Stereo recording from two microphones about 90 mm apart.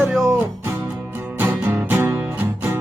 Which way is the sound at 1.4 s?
20° right (ahead or behind).